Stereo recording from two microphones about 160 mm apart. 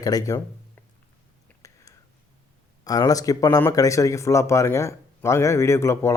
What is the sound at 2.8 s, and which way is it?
Speech, 20° left (ahead or behind).